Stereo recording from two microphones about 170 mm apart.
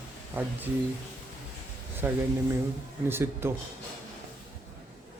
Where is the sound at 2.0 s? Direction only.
15° right (ahead or behind).